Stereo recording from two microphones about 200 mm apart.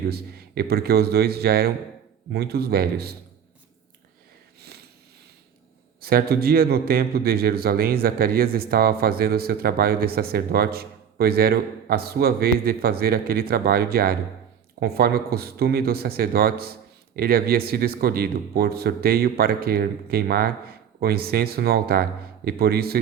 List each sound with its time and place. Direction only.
0.1 s speech: 50° right (ahead or behind)
6.0 s speech: 50° right (ahead or behind)